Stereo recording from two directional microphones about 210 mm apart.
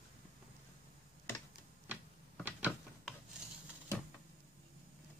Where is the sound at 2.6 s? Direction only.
Centre (ahead or behind).